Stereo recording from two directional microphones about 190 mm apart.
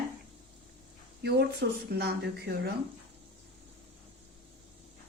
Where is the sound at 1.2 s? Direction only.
60° right (ahead or behind).